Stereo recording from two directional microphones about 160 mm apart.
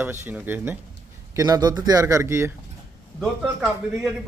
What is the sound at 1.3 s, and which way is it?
A man's voice, 25° right (ahead or behind).